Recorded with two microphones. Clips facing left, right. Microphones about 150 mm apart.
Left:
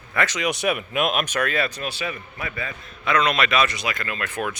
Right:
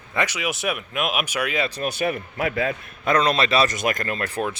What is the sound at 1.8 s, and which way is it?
Speech, 50° right (ahead or behind).